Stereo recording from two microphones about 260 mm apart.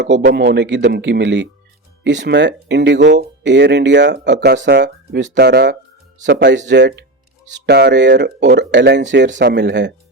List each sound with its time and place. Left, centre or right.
0.3 s speech: right